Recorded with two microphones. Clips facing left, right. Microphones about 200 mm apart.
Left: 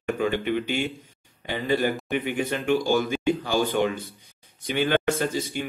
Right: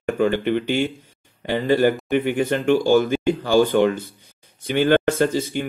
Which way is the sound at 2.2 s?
50° right (ahead or behind).